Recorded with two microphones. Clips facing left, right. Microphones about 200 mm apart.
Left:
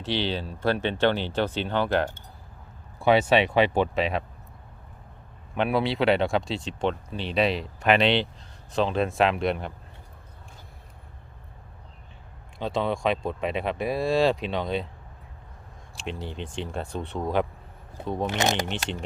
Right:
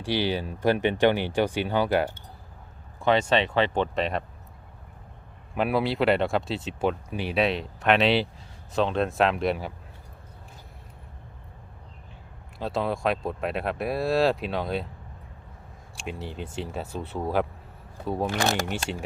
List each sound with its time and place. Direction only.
0.0 s speech: 10° right (ahead or behind)
3.0 s speech: 10° left (ahead or behind)
5.5 s speech: centre (ahead or behind)
12.5 s speech: centre (ahead or behind)
16.0 s speech: 5° right (ahead or behind)
18.3 s speech: 20° left (ahead or behind)
18.7 s speech: 10° right (ahead or behind)